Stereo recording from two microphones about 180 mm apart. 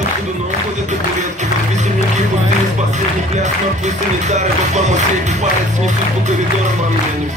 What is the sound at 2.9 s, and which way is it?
Music, 40° right (ahead or behind).